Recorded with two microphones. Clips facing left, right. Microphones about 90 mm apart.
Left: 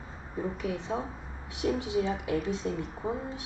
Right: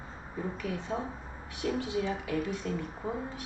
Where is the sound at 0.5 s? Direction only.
20° left (ahead or behind).